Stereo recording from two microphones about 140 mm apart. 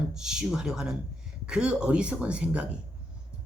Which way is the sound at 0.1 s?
5° right (ahead or behind).